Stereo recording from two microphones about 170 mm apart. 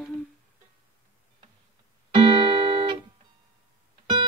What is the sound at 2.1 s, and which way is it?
Music, 30° right (ahead or behind).